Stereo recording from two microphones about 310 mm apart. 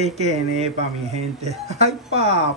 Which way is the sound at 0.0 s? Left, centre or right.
Centre.